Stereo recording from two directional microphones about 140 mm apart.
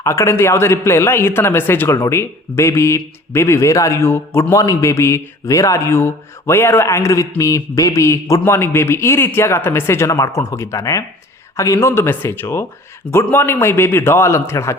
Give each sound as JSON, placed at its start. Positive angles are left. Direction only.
{"t": 0.0, "sound": "a man's voice", "side_deg": 20}